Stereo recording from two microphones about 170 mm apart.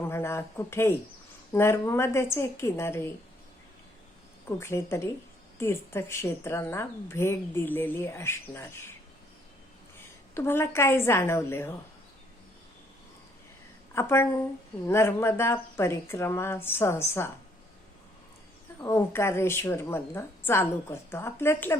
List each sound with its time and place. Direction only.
0.0 s speech: 15° left (ahead or behind)
4.4 s speech: 15° left (ahead or behind)
10.3 s speech: 15° left (ahead or behind)
13.9 s speech: 15° left (ahead or behind)
18.8 s speech: 15° left (ahead or behind)